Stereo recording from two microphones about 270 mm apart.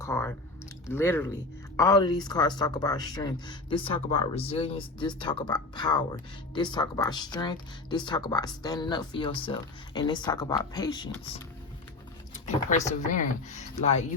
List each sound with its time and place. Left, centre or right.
0.0 s a sound: centre
0.9 s speech: centre
12.7 s speech: left